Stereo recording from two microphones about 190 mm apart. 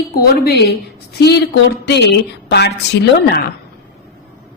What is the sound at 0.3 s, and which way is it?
Speech, 55° left (ahead or behind).